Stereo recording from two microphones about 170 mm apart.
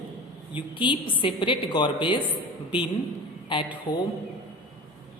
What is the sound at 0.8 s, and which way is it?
A woman's voice, 30° left (ahead or behind).